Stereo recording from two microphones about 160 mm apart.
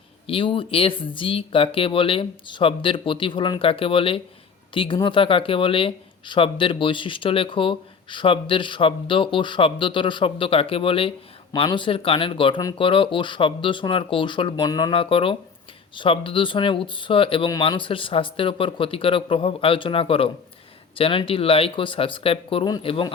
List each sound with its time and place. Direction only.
0.3 s speech: 35° left (ahead or behind)